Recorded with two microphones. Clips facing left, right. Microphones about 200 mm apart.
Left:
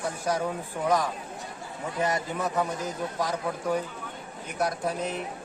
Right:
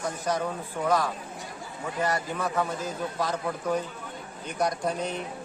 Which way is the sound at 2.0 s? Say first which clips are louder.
Even; 20° left (ahead or behind).